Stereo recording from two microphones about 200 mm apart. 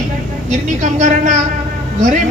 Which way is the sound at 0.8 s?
35° right (ahead or behind).